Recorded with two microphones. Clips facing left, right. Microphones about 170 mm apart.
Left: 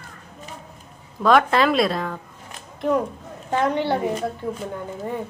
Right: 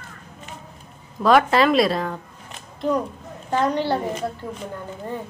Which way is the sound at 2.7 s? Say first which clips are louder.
Left 1 dB; 20° left (ahead or behind).